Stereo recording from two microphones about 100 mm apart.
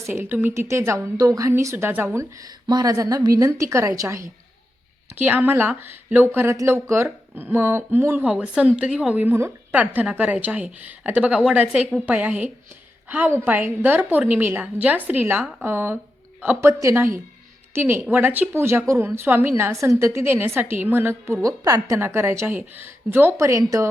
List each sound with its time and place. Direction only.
0.1 s a woman's voice: 20° right (ahead or behind)
5.1 s a woman's voice: 20° right (ahead or behind)
8.2 s a woman's voice: 10° right (ahead or behind)
21.4 s a woman's voice: 35° right (ahead or behind)